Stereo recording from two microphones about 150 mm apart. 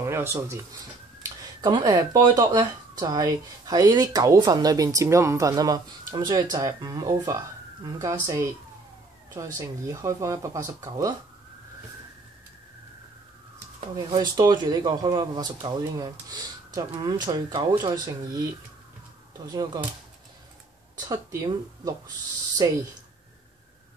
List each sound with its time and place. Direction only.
0.0 s speech: 15° right (ahead or behind)
1.6 s speech: 25° right (ahead or behind)
9.6 s speech: 25° right (ahead or behind)
13.9 s speech: 30° right (ahead or behind)
19.4 s speech: 25° right (ahead or behind)
21.1 s speech: 25° right (ahead or behind)